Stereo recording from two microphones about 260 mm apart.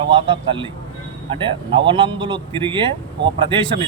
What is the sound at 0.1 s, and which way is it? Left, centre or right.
Speech, centre.